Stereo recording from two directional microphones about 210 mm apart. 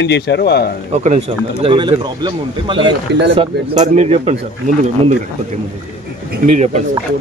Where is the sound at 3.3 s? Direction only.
30° right (ahead or behind).